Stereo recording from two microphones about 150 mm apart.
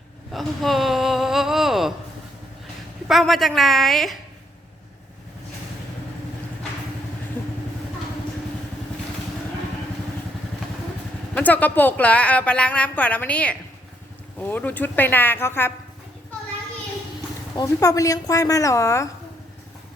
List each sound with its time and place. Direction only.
0.3 s a sound: centre (ahead or behind)
3.1 s a woman's voice: centre (ahead or behind)
11.3 s a woman's voice: 10° left (ahead or behind)
17.5 s speech: 20° left (ahead or behind)